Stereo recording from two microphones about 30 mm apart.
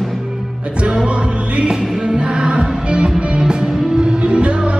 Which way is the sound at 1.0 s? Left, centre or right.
Right.